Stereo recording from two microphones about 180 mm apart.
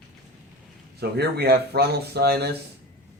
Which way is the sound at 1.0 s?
65° right (ahead or behind).